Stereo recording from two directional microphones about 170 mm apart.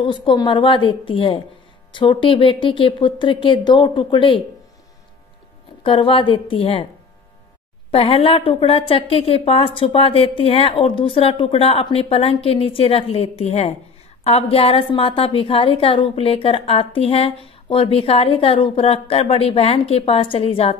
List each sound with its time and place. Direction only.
0.0 s speech: 30° left (ahead or behind)
5.9 s a woman's voice: 30° left (ahead or behind)
7.9 s a woman's voice: 35° left (ahead or behind)